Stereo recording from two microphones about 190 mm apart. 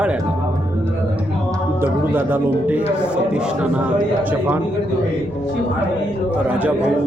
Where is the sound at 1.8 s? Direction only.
10° right (ahead or behind).